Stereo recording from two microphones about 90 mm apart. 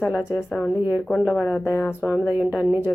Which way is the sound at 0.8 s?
20° right (ahead or behind).